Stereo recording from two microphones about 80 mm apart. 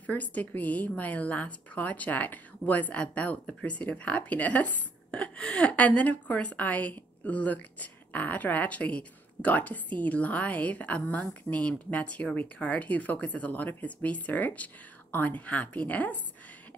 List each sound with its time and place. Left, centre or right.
0.0 s a woman's voice: centre